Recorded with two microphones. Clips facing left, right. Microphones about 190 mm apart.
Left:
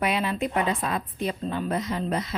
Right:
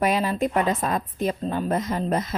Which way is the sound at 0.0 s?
40° right (ahead or behind).